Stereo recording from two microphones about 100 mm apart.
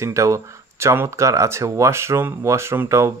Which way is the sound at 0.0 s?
30° right (ahead or behind).